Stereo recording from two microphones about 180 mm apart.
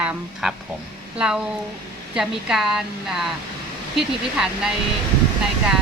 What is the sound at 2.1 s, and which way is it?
A woman's voice, 5° right (ahead or behind).